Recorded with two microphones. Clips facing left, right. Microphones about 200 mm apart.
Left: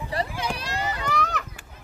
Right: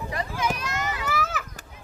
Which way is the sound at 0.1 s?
35° left (ahead or behind).